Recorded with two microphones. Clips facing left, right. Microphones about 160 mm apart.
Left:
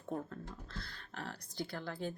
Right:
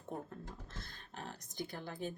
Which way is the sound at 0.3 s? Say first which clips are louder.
Left 2 dB; 20° right (ahead or behind).